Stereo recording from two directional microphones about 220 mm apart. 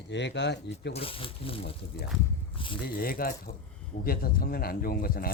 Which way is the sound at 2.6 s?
25° left (ahead or behind).